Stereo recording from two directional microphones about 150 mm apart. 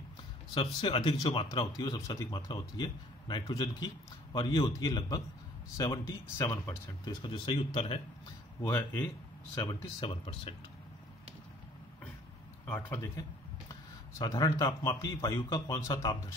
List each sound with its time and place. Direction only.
0.6 s speech: 35° left (ahead or behind)
8.6 s speech: 15° left (ahead or behind)
9.6 s speech: 25° left (ahead or behind)
12.6 s speech: 15° left (ahead or behind)
14.1 s speech: 25° left (ahead or behind)